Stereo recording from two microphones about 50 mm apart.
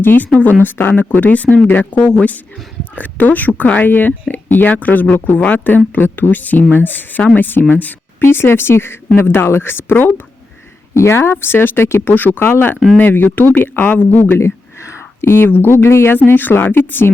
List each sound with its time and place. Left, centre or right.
0.0 s speech: left
5.1 s speech: left
8.2 s speech: left
10.9 s speech: left
12.1 s speech: left
12.4 s speech: left
13.0 s speech: left
14.3 s a sound: left
15.4 s speech: left
16.3 s speech: left